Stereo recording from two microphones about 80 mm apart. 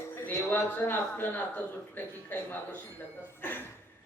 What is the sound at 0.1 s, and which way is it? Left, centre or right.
Speech, left.